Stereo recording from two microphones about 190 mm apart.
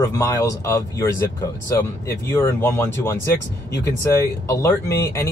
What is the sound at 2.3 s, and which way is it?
Speech, 15° left (ahead or behind).